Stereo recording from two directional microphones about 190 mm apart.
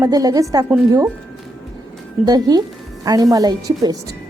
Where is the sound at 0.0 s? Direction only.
20° right (ahead or behind).